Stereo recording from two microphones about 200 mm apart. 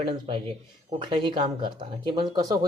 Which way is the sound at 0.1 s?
25° right (ahead or behind).